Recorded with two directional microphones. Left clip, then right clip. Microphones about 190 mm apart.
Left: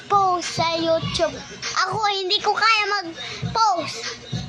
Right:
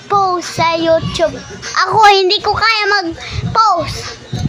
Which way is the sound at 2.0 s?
35° right (ahead or behind).